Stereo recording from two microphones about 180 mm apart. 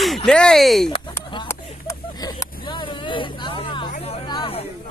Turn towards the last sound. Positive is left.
turn(degrees=30)  # may be behind; listen again after turning